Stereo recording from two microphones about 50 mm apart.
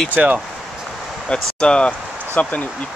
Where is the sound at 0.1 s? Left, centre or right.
Right.